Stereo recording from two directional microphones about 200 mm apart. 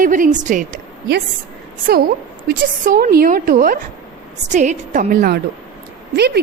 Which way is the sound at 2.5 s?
45° right (ahead or behind).